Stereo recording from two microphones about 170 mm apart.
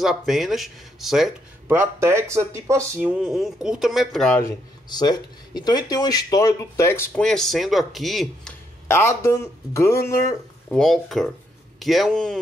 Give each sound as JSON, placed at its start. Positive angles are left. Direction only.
{"t": 0.0, "sound": "speech", "side_deg": 0}
{"t": 1.7, "sound": "speech", "side_deg": -15}
{"t": 4.4, "sound": "speech", "side_deg": 25}
{"t": 7.2, "sound": "speech", "side_deg": 0}
{"t": 8.8, "sound": "speech", "side_deg": 15}
{"t": 10.7, "sound": "speech", "side_deg": 0}